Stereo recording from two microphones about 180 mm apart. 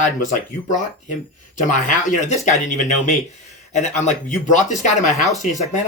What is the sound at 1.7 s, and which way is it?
Speech, 45° left (ahead or behind).